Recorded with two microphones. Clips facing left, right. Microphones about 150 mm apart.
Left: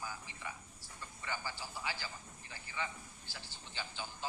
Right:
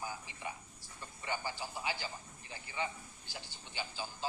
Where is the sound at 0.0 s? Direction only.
20° right (ahead or behind).